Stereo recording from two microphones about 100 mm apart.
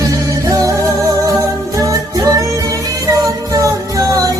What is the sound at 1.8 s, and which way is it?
Music, 35° right (ahead or behind).